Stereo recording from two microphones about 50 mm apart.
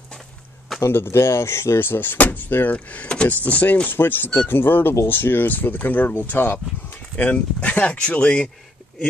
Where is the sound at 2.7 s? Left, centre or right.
Left.